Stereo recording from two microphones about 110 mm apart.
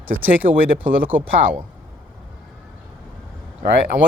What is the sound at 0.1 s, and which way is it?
Speech, 15° right (ahead or behind).